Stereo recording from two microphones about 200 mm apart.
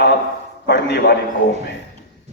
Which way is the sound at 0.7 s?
60° left (ahead or behind).